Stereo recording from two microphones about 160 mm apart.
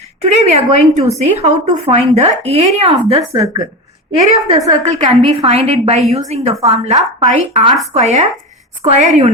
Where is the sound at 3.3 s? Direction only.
20° right (ahead or behind).